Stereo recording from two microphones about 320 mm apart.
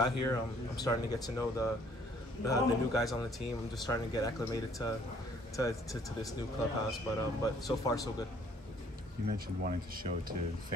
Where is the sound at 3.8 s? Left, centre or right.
Centre.